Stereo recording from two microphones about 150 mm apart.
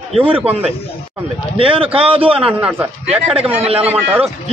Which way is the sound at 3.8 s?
10° right (ahead or behind).